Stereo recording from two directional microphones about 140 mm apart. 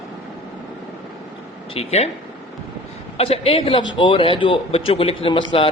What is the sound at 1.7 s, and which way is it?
Speech, 50° left (ahead or behind).